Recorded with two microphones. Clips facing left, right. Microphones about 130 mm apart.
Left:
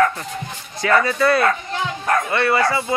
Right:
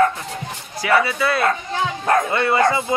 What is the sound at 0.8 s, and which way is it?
Speech, 10° right (ahead or behind).